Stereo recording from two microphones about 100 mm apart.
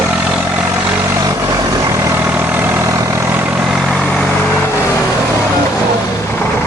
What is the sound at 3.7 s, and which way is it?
Vehicle, centre (ahead or behind).